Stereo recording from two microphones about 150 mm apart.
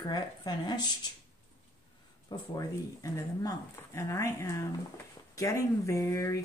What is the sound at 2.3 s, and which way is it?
Speech, 20° left (ahead or behind).